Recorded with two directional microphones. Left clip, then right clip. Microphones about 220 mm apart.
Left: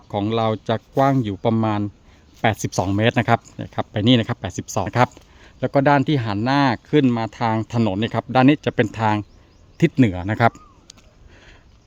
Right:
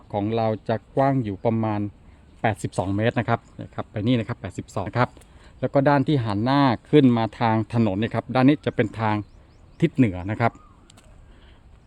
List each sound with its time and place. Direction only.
0.1 s speech: 15° left (ahead or behind)